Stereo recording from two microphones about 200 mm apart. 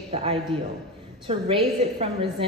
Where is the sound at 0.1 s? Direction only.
30° right (ahead or behind).